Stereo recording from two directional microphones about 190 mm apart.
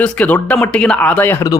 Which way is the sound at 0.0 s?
5° left (ahead or behind).